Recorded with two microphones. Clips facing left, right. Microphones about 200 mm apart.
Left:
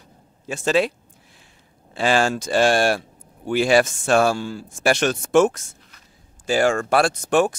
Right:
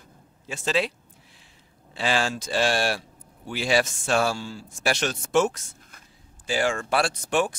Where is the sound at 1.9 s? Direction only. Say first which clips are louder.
Left 6 dB; 50° left (ahead or behind).